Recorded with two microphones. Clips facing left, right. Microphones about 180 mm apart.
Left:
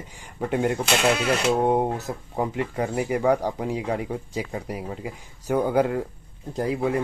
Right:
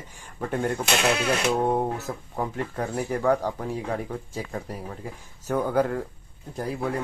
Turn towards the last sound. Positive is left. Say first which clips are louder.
# left 5 dB
turn(degrees=15)  # may be behind; listen again after turning